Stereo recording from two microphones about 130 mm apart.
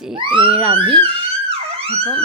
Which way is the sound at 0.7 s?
40° right (ahead or behind).